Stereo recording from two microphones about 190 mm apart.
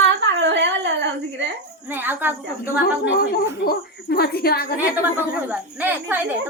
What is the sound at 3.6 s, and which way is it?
A woman's voice, 55° left (ahead or behind).